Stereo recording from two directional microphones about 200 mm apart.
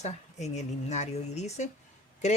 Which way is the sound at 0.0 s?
35° left (ahead or behind).